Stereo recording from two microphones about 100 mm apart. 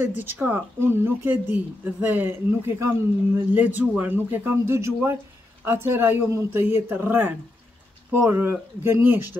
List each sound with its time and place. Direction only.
0.0 s speech: 20° right (ahead or behind)